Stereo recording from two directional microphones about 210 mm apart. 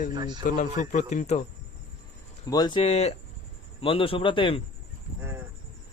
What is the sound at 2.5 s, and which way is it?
Speech, 20° left (ahead or behind).